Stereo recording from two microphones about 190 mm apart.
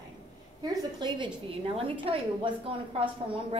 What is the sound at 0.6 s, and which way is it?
Speech, 25° right (ahead or behind).